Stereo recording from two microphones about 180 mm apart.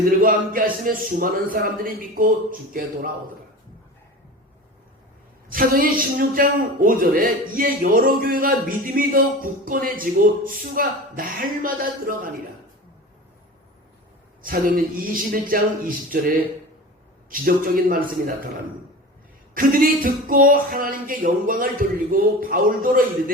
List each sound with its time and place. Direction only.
0.2 s a man's voice: 50° right (ahead or behind)
5.5 s a man's voice: 50° right (ahead or behind)
15.1 s a man's voice: 50° right (ahead or behind)
19.5 s a man's voice: 50° right (ahead or behind)